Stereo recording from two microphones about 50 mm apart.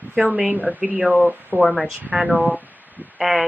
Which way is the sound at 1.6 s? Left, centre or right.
Centre.